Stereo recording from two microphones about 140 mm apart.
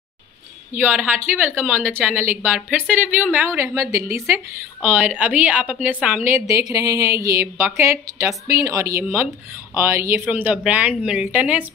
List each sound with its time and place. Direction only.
0.7 s a woman's voice: 15° right (ahead or behind)
4.9 s a woman's voice: 10° right (ahead or behind)